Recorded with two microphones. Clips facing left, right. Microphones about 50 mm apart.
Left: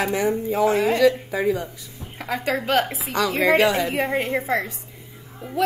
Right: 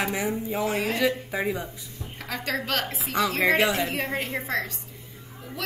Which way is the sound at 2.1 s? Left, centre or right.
Centre.